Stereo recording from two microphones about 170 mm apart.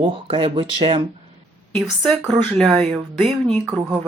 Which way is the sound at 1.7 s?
Centre (ahead or behind).